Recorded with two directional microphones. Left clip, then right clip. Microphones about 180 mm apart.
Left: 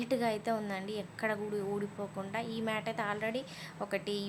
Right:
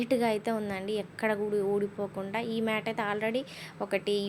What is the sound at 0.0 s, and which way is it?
A woman's voice, 20° right (ahead or behind).